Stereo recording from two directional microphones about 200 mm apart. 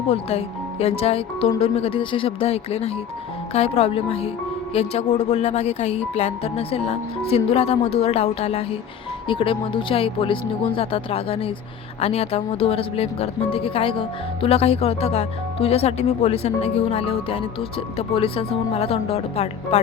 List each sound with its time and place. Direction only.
0.1 s a woman's voice: 30° left (ahead or behind)